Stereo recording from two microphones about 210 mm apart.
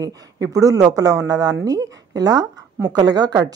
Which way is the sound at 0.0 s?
15° right (ahead or behind).